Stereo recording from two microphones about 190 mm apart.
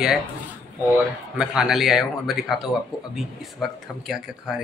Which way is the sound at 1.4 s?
5° right (ahead or behind).